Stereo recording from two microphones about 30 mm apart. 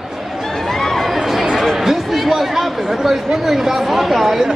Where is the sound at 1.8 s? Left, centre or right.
Centre.